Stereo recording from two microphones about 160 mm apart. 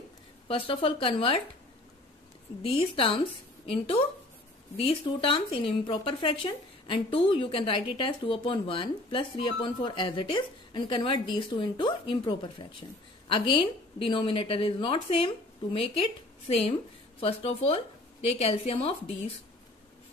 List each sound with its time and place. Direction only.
0.5 s speech: 35° left (ahead or behind)
2.6 s speech: 35° left (ahead or behind)